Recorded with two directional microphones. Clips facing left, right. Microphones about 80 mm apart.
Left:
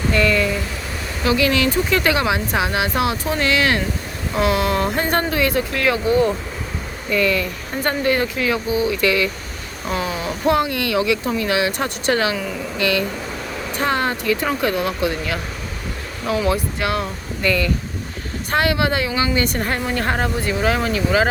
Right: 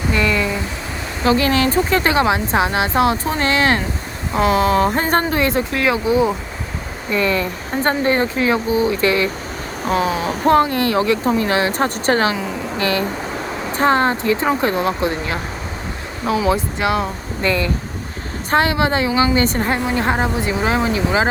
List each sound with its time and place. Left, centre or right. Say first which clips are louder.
0.1 s a sound: left 1 dB; centre
1.2 s speech: right 2 dB; right; by 6.3 s centre
7.1 s a woman's voice: right 1 dB; right
16.5 s a woman's voice: right 3 dB; right